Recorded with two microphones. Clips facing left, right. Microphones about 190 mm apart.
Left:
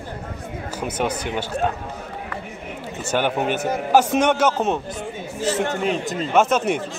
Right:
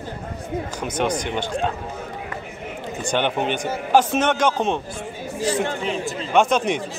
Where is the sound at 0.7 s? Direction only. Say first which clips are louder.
Even; 5° left (ahead or behind).